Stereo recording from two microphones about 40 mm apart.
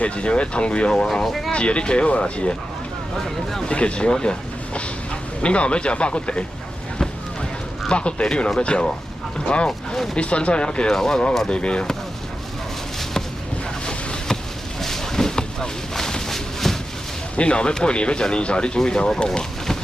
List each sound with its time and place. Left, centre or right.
0.0 s speech: left
1.0 s speech: centre
1.5 s speech: left
3.6 s speech: left
7.9 s speech: left
10.1 s speech: left
11.5 s speech: left
13.8 s vehicle: centre
17.4 s speech: left
19.2 s a sound: centre